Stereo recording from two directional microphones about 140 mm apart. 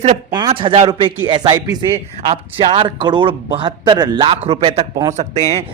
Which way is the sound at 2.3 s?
45° right (ahead or behind).